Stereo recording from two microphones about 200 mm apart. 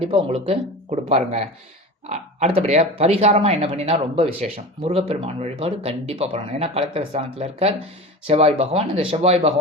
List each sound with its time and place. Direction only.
0.0 s speech: 30° right (ahead or behind)